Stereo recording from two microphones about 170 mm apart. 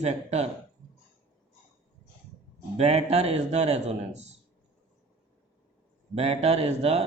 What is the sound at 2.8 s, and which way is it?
A man's voice, 40° right (ahead or behind).